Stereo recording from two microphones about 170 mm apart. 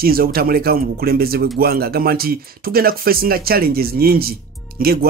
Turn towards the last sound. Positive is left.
turn(degrees=-65)  # may be behind; listen again after turning